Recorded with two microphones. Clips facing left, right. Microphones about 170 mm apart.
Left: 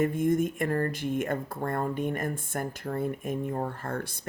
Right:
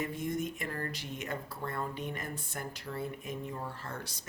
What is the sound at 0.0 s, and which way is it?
Speech, 50° left (ahead or behind).